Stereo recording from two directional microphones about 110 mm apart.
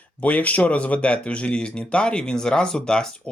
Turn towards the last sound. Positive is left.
turn(degrees=10)  # may be behind; listen again after turning